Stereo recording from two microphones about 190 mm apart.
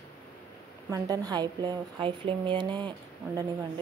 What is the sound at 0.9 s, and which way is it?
Speech, 20° right (ahead or behind).